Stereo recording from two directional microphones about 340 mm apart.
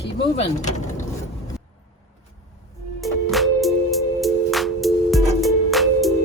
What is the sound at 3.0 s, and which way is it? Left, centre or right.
Music, centre.